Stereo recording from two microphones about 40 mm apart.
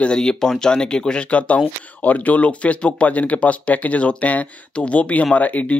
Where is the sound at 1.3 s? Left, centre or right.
Left.